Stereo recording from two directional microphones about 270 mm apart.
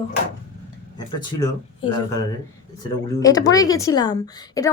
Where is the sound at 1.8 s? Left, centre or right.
Centre.